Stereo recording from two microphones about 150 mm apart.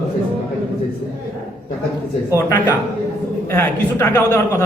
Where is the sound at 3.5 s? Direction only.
15° left (ahead or behind).